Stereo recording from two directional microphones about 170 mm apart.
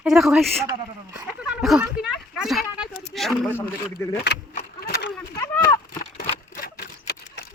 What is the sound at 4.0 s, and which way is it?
Speech, 15° left (ahead or behind).